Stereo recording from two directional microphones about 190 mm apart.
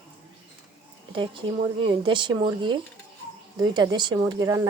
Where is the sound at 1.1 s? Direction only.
25° right (ahead or behind).